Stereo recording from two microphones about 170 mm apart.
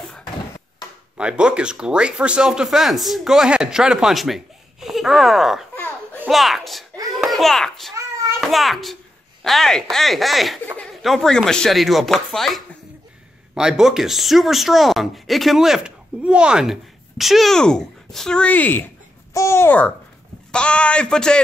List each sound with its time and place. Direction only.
1.1 s a child's voice: 5° right (ahead or behind)
7.9 s a sound: 15° right (ahead or behind)
8.4 s a child's voice: centre (ahead or behind)